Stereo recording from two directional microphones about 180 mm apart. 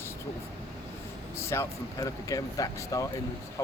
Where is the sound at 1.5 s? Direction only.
15° left (ahead or behind).